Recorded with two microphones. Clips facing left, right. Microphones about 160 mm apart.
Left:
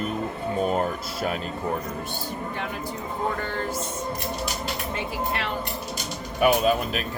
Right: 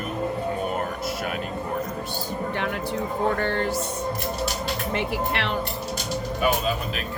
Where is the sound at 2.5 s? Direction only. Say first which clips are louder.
Right 4 dB; 70° right (ahead or behind).